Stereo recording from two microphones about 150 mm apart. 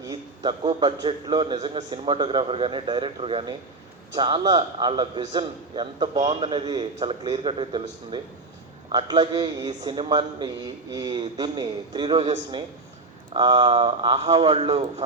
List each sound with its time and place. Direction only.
0.0 s a man's voice: 30° right (ahead or behind)
13.3 s a man's voice: 30° right (ahead or behind); by 15.0 s 45° right (ahead or behind)